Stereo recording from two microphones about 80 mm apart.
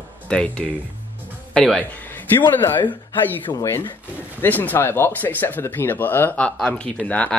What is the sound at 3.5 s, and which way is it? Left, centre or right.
Speech, left.